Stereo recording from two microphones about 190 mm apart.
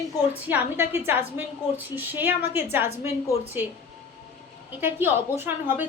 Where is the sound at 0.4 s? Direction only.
10° right (ahead or behind).